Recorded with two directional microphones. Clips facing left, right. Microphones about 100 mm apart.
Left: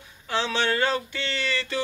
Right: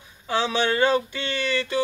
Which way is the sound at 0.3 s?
15° right (ahead or behind).